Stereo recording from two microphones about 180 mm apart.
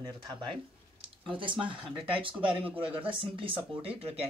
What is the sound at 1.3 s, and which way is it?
Speech, 30° right (ahead or behind).